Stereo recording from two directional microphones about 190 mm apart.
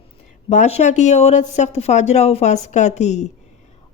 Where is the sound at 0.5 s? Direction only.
35° left (ahead or behind).